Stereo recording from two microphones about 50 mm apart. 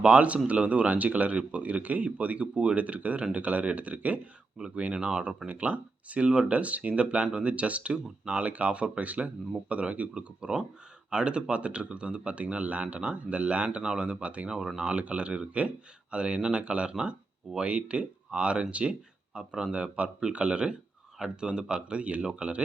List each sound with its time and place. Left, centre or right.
0.0 s speech: right
4.5 s speech: centre